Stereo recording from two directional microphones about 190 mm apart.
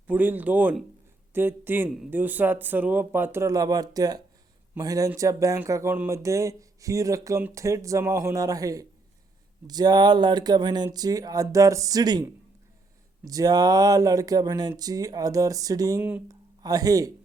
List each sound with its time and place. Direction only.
0.1 s speech: 10° right (ahead or behind)
16.6 s speech: 20° right (ahead or behind)